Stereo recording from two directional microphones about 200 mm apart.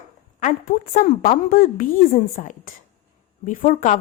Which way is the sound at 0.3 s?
40° left (ahead or behind).